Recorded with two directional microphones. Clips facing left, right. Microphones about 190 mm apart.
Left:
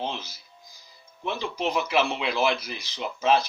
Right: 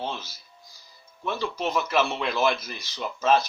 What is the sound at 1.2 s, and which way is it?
Speech, 15° left (ahead or behind).